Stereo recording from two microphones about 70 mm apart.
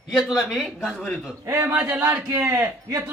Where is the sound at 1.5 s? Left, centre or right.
Right.